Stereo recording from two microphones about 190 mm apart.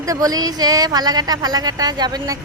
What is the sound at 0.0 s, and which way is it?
Speech, 20° right (ahead or behind).